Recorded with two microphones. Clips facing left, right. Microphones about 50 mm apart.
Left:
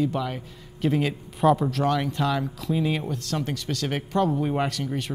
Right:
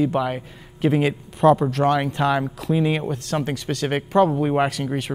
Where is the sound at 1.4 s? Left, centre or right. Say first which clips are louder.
Right 4 dB; centre.